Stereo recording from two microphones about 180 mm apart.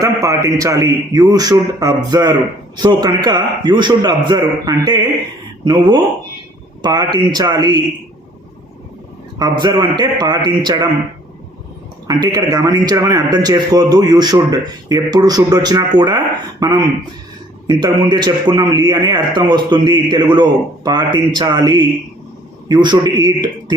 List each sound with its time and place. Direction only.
0.0 s a man's voice: 20° right (ahead or behind)
9.4 s a man's voice: 25° right (ahead or behind)
12.0 s a man's voice: 20° right (ahead or behind)